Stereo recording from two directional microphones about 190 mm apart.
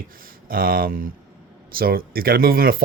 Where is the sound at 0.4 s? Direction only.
50° right (ahead or behind).